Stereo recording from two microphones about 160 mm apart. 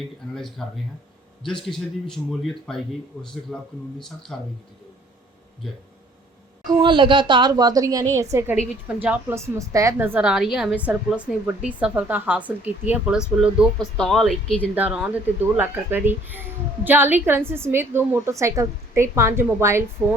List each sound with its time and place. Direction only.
0.3 s speech: centre (ahead or behind)
1.7 s speech: 5° left (ahead or behind)
6.7 s a woman's voice: 30° right (ahead or behind); by 14.3 s centre (ahead or behind)
14.8 s speech: 10° right (ahead or behind)